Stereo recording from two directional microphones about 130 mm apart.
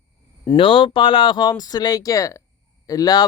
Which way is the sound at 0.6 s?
40° left (ahead or behind).